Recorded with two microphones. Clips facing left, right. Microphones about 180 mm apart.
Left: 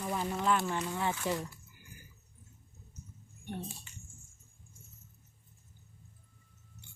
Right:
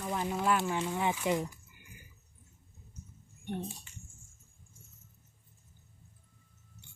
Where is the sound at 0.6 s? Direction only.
20° right (ahead or behind).